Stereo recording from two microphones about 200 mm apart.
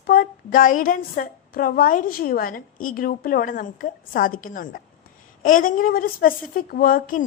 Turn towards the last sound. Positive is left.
turn(degrees=45)  # may be behind; listen again after turning